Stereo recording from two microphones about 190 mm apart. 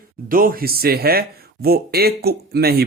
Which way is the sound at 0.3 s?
50° right (ahead or behind).